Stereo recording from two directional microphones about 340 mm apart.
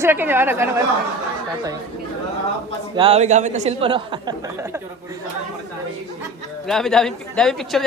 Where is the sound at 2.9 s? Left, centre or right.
Centre.